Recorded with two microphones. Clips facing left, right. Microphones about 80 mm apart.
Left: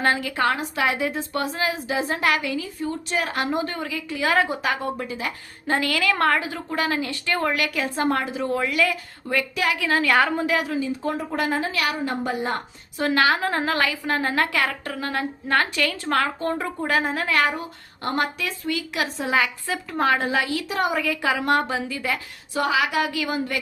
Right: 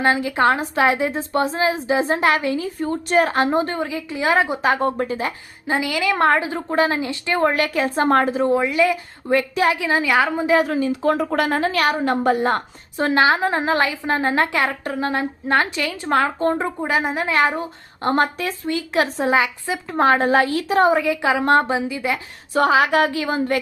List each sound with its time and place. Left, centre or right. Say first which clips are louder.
0.0 s a woman's voice: right 4 dB; right
4.8 s a woman's voice: right 7 dB; right
5.6 s a woman's voice: right 2 dB; centre; by 8.0 s right
8.0 s a woman's voice: right 7 dB; right
8.4 s a woman's voice: right 5 dB; right
10.1 s a woman's voice: right 1 dB; centre
10.4 s a woman's voice: right 6 dB; right
10.7 s a woman's voice: right 6 dB; right
13.0 s a woman's voice: right 4 dB; right
20.0 s a woman's voice: right 6 dB; right
21.8 s a woman's voice: right 4 dB; centre
22.5 s a woman's voice: right 6 dB; right